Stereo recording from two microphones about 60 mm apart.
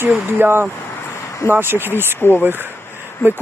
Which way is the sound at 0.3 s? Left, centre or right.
Right.